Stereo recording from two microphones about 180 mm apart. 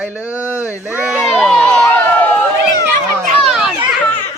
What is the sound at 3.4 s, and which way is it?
Speech, 5° right (ahead or behind).